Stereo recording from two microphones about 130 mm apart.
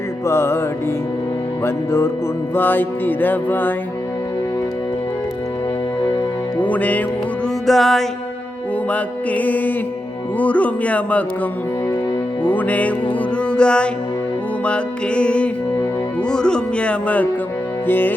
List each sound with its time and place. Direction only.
0.3 s music: 20° left (ahead or behind)
1.6 s music: 20° left (ahead or behind)
6.6 s music: 10° left (ahead or behind)
7.7 s music: centre (ahead or behind)
12.4 s music: 15° left (ahead or behind)